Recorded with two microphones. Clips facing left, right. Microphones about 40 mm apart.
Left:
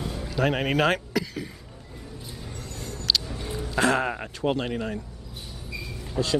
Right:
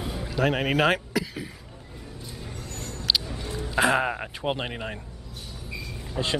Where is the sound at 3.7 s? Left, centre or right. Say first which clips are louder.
Right 1 dB; centre.